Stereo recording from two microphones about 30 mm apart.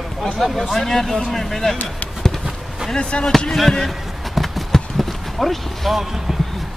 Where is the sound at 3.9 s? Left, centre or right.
Centre.